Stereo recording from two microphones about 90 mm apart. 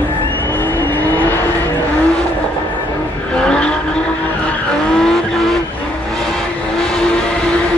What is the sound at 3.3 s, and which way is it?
Vehicle, 10° left (ahead or behind).